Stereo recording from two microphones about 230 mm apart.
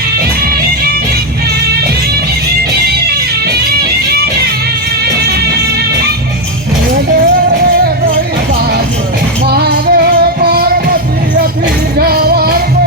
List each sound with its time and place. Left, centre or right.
9.5 s music: right
11.9 s music: right